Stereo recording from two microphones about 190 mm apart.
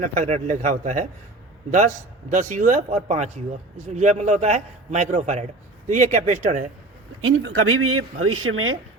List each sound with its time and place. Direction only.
0.0 s a man's voice: 40° right (ahead or behind)
2.3 s a man's voice: 40° right (ahead or behind)
7.3 s speech: 90° right